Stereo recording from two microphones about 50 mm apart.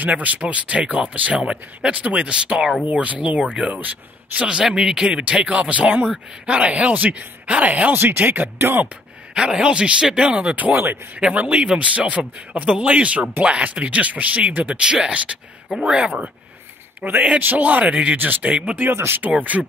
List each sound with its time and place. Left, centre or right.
0.0 s speech: right
8.0 s speech: right
9.3 s speech: centre
10.7 s speech: right
11.1 s speech: right
17.4 s speech: right